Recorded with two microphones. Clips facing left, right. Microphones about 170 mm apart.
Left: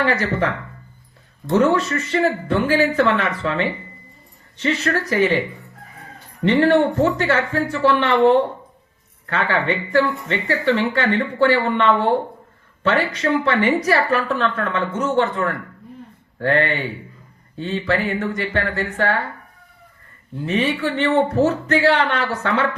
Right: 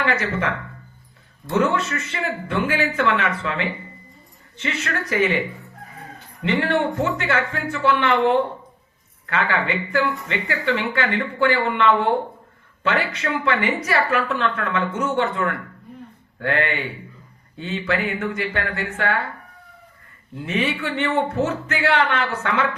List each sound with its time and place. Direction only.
0.0 s speech: 35° left (ahead or behind)
6.4 s speech: 35° left (ahead or behind)
20.4 s speech: 35° left (ahead or behind)